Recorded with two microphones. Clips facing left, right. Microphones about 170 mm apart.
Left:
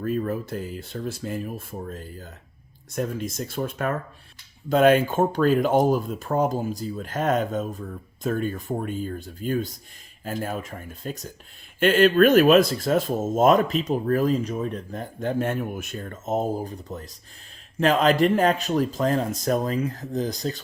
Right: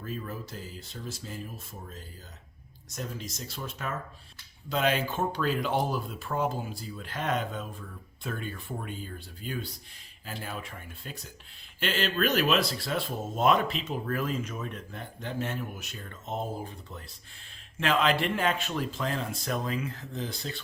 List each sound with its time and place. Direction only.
0.0 s speech: 55° left (ahead or behind); by 20.6 s 40° left (ahead or behind)